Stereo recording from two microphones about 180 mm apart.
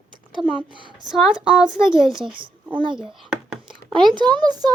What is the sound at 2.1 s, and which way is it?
Speech, 25° right (ahead or behind).